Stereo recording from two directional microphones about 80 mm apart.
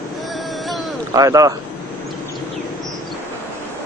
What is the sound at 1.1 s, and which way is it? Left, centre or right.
Speech, right.